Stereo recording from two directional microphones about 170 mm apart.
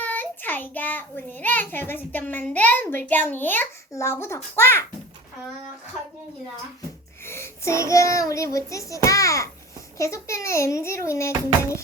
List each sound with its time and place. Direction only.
0.0 s a child's voice: 10° left (ahead or behind)
7.3 s child singing: 15° left (ahead or behind)
10.0 s a child's voice: 20° left (ahead or behind)